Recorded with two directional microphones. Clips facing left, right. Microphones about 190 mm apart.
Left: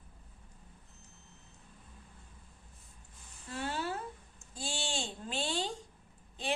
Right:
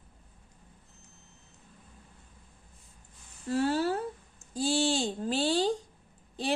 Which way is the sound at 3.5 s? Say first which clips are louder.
Right 10 dB; 40° right (ahead or behind).